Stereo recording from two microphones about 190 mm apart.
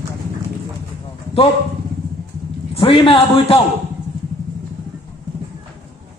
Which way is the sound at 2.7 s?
30° left (ahead or behind).